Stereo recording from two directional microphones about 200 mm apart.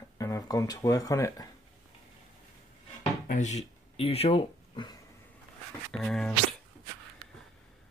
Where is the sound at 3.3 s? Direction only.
35° left (ahead or behind).